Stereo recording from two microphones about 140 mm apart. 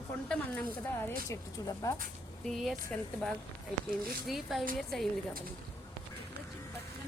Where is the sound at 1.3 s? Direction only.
25° left (ahead or behind).